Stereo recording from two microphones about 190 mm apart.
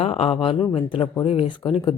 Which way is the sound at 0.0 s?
30° left (ahead or behind).